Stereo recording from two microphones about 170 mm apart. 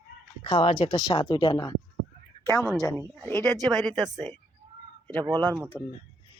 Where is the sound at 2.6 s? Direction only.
15° right (ahead or behind).